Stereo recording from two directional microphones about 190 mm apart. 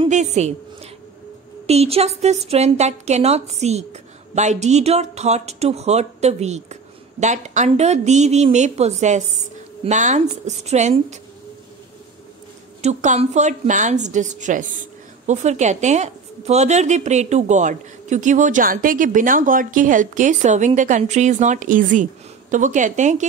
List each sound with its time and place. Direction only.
0.0 s a woman's voice: 35° right (ahead or behind)
12.8 s a woman's voice: 40° right (ahead or behind)